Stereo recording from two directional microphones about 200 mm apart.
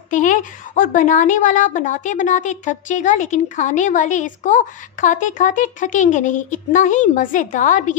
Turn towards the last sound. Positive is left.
turn(degrees=40)  # may be behind; listen again after turning